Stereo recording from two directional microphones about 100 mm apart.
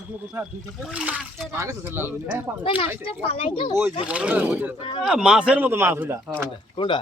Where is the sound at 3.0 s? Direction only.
65° left (ahead or behind).